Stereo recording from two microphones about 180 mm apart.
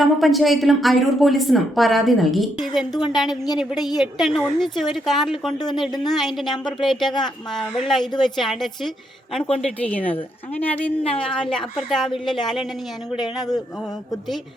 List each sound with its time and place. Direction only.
0.0 s a woman's voice: centre (ahead or behind)
2.9 s speech: 25° left (ahead or behind)
3.6 s a woman's voice: centre (ahead or behind)